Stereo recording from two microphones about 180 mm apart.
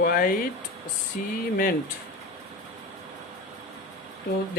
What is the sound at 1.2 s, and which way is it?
Speech, 55° left (ahead or behind).